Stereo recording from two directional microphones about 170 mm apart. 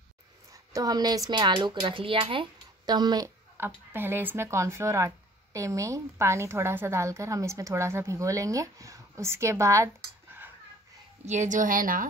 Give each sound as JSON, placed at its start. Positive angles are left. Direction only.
{"t": 0.5, "sound": "speech", "side_deg": -20}
{"t": 3.5, "sound": "speech", "side_deg": -10}
{"t": 11.2, "sound": "a woman's voice", "side_deg": -45}